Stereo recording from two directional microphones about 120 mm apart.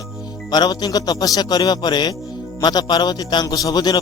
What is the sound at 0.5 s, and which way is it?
Speech, 35° left (ahead or behind).